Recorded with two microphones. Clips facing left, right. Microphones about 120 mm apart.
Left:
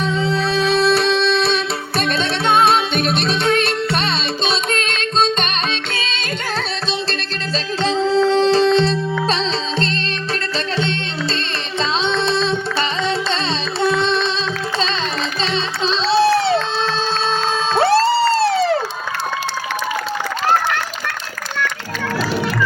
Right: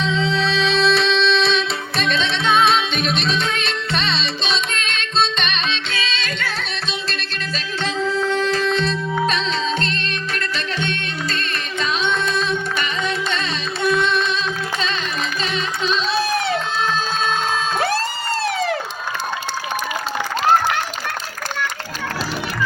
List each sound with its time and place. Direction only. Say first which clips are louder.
0.0 s music: left 1 dB; 50° left (ahead or behind)
7.8 s music: left 6 dB; 35° left (ahead or behind)
13.8 s music: left 1 dB; 30° left (ahead or behind)
15.9 s crowd: left 7 dB; 30° left (ahead or behind)
17.7 s cheering: left 11 dB; 30° left (ahead or behind)
18.3 s crowd: left 6 dB; 35° left (ahead or behind)